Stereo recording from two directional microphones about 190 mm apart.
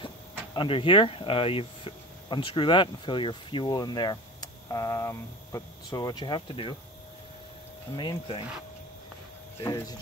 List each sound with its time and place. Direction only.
0.6 s speech: 25° left (ahead or behind)
7.9 s speech: 20° left (ahead or behind)
9.6 s speech: 20° left (ahead or behind)